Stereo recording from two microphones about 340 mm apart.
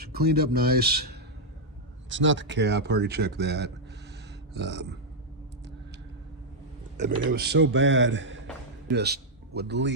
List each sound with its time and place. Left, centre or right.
0.0 s speech: right
6.9 s a man's voice: right